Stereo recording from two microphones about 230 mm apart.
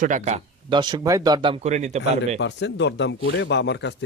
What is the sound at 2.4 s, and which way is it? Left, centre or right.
Speech, left.